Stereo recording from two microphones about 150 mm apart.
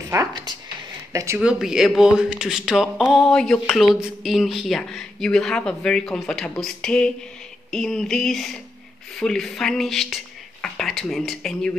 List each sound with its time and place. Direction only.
0.1 s speech: 20° right (ahead or behind)
1.4 s speech: 5° right (ahead or behind)